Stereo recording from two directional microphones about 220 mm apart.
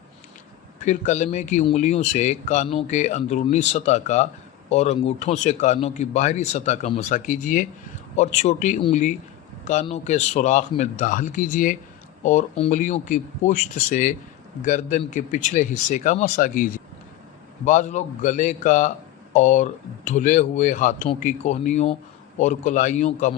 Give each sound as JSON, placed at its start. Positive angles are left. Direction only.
{"t": 0.8, "sound": "a man's voice", "side_deg": 35}